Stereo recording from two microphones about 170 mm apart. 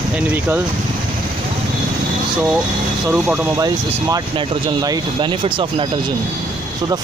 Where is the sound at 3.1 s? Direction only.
15° right (ahead or behind).